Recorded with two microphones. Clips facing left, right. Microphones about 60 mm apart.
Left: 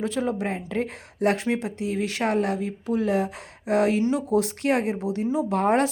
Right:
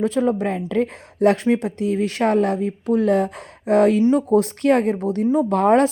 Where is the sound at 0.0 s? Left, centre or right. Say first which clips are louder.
Right 6 dB; right.